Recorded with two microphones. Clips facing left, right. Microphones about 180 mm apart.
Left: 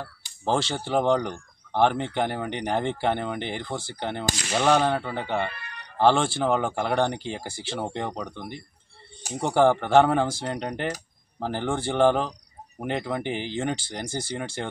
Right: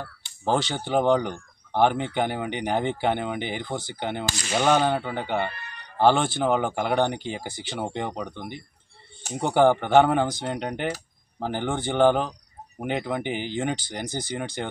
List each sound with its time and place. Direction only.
0.5 s speech: centre (ahead or behind)